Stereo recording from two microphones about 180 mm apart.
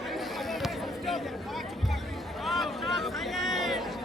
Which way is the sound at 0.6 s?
Centre (ahead or behind).